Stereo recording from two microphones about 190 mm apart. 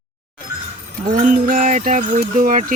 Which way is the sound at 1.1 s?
45° right (ahead or behind).